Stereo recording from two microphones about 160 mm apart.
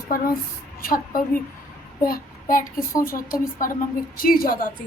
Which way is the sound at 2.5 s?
60° left (ahead or behind).